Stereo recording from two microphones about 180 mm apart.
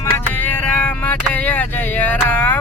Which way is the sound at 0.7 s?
10° left (ahead or behind).